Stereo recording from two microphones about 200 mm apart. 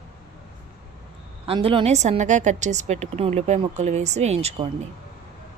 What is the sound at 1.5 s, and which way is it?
A woman's voice, 25° right (ahead or behind).